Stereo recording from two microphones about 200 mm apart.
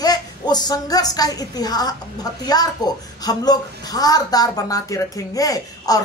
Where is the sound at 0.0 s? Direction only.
20° left (ahead or behind).